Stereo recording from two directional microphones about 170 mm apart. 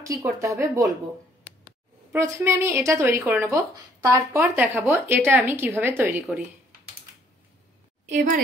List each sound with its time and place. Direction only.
0.0 s a woman's voice: 20° right (ahead or behind)
2.1 s speech: 15° right (ahead or behind)